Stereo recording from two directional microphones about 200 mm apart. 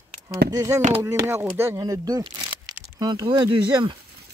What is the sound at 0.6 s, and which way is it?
Speech, 15° right (ahead or behind).